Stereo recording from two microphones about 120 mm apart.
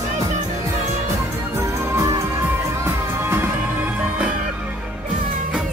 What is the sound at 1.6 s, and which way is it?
Music, 25° right (ahead or behind).